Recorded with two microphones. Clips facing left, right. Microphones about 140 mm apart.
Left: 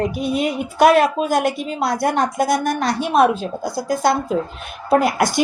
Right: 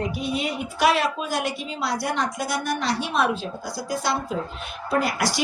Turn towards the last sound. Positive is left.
turn(degrees=50)  # may be behind; listen again after turning